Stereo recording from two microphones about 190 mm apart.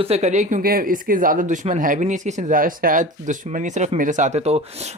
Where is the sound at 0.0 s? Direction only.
35° right (ahead or behind).